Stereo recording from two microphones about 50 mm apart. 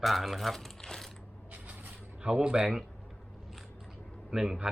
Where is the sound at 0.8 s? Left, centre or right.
Centre.